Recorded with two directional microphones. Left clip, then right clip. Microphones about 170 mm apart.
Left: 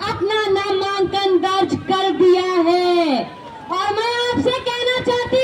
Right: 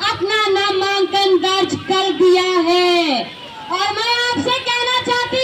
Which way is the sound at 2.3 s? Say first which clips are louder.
Right 1 dB; 40° left (ahead or behind).